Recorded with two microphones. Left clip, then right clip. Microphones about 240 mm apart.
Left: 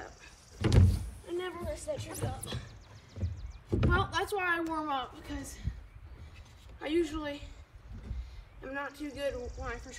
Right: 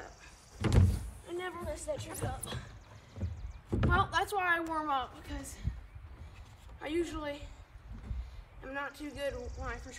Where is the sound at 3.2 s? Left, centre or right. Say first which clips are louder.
Left 1 dB; centre.